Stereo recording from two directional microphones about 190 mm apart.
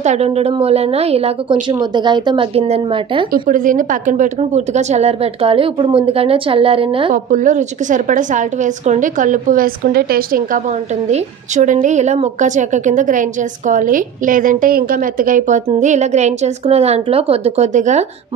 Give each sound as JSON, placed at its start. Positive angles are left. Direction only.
{"t": 0.0, "sound": "a woman's voice", "side_deg": -35}
{"t": 3.3, "sound": "a woman's voice", "side_deg": -45}
{"t": 7.2, "sound": "a woman's voice", "side_deg": -40}
{"t": 11.1, "sound": "a woman's voice", "side_deg": -35}